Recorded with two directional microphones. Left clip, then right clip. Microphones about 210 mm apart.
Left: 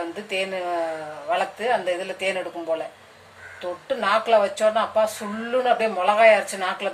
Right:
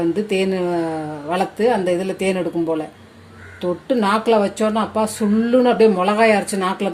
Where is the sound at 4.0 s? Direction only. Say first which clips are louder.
Right 1 dB; 45° right (ahead or behind).